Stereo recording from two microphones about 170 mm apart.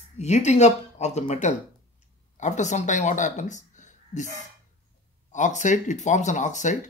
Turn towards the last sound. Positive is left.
turn(degrees=45)  # may be behind; listen again after turning